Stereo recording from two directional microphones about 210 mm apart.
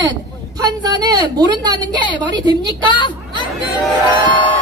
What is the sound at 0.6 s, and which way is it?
A woman's voice, 20° right (ahead or behind).